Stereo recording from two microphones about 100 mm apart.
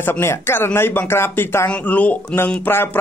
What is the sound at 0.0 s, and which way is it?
A man's voice, 25° left (ahead or behind).